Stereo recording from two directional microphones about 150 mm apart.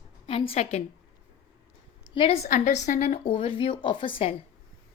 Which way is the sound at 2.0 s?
35° left (ahead or behind).